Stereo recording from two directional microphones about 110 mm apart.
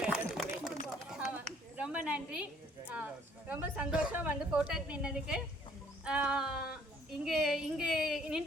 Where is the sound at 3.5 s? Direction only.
10° right (ahead or behind).